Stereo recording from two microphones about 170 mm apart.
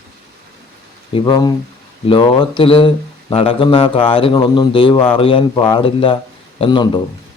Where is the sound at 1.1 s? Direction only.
25° left (ahead or behind).